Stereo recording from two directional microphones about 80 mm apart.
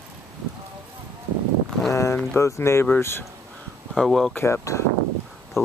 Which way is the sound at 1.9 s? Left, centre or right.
Left.